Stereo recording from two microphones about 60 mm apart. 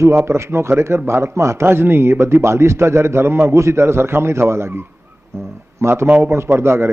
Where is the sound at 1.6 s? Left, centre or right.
Right.